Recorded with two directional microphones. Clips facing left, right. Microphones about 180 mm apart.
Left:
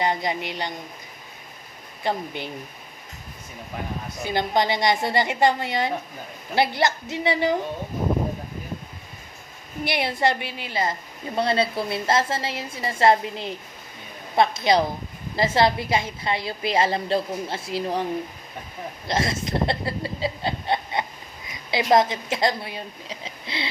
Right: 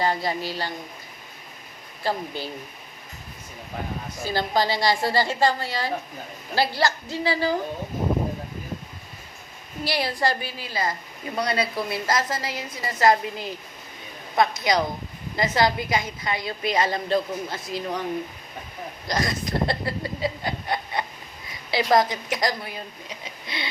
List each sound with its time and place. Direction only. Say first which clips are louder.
0.0 s a woman's voice: even; 20° left (ahead or behind)
2.0 s a woman's voice: left 1 dB; 20° left (ahead or behind)
4.2 s a woman's voice: left 1 dB; 20° left (ahead or behind)
9.8 s a woman's voice: left 2 dB; 20° left (ahead or behind)
19.0 s chuckle: left 1 dB; 25° left (ahead or behind)
21.7 s a woman's voice: left 1 dB; 20° left (ahead or behind)